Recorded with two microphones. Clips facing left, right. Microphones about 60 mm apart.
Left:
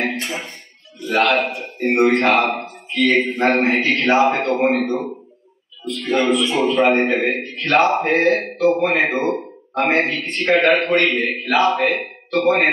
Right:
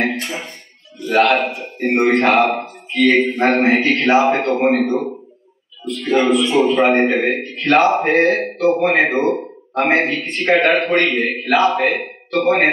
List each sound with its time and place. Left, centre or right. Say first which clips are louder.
0.0 s music: right 2 dB; centre
1.0 s a man's voice: right 3 dB; centre